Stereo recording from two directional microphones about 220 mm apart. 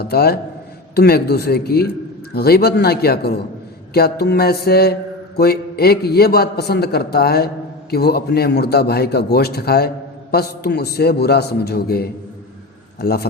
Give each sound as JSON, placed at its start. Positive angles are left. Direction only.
{"t": 0.0, "sound": "a man's voice", "side_deg": 45}